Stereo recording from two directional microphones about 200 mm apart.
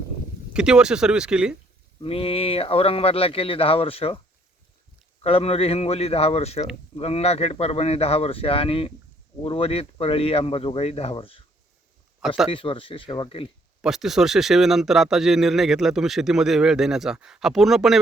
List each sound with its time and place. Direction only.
0.5 s speech: 5° right (ahead or behind)
2.0 s speech: 30° left (ahead or behind)
5.2 s speech: 30° left (ahead or behind)
12.5 s speech: 25° left (ahead or behind)
13.8 s speech: centre (ahead or behind)